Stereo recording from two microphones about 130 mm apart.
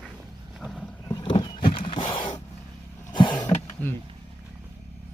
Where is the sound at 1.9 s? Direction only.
40° left (ahead or behind).